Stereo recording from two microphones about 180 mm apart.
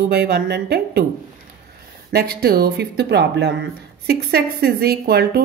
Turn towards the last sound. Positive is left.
turn(degrees=-65)  # may be behind; listen again after turning